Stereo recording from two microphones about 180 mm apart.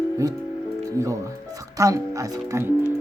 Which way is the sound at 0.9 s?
20° right (ahead or behind).